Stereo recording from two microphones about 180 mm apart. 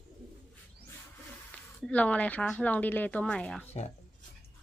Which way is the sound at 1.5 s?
5° left (ahead or behind).